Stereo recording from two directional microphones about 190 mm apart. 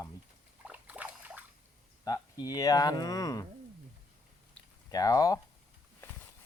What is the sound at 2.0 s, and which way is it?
Speech, 20° left (ahead or behind).